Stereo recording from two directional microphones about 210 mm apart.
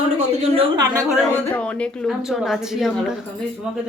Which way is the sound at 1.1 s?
5° left (ahead or behind).